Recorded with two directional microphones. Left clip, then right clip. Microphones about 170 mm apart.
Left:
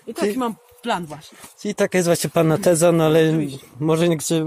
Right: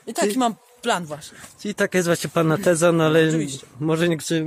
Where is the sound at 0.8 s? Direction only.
55° right (ahead or behind).